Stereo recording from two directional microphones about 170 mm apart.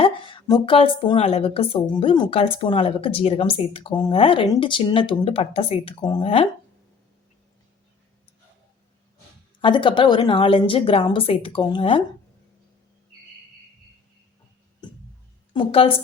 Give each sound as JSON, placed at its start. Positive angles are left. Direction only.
{"t": 0.0, "sound": "speech", "side_deg": 30}
{"t": 9.6, "sound": "a woman's voice", "side_deg": 30}
{"t": 15.5, "sound": "speech", "side_deg": 35}